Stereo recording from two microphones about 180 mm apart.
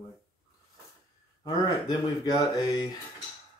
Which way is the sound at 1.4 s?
20° left (ahead or behind).